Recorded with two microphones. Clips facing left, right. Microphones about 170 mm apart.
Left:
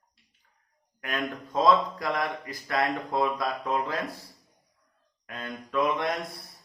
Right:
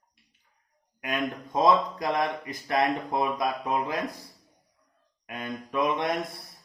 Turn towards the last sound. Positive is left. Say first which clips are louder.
# even
turn(degrees=-20)  # may be behind; listen again after turning